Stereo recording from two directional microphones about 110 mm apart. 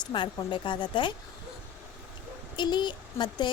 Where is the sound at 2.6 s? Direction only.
45° left (ahead or behind).